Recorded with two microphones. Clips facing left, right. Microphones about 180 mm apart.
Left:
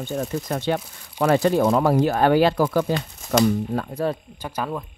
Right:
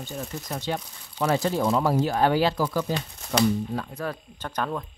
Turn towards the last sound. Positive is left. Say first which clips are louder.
# left 7 dB
turn(degrees=30)  # may be behind; listen again after turning